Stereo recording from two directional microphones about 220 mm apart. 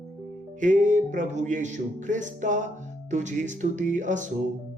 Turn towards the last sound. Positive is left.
turn(degrees=-35)  # may be behind; listen again after turning